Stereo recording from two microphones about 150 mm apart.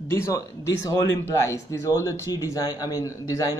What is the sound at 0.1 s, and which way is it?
A man's voice, 20° left (ahead or behind).